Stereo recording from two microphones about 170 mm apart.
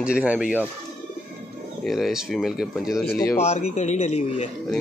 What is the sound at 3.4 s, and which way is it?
A man's voice, 40° left (ahead or behind).